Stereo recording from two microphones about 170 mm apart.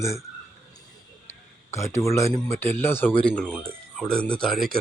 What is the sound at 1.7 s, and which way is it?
Speech, 15° left (ahead or behind).